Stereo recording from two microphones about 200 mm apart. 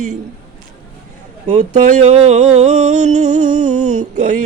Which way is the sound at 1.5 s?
35° right (ahead or behind).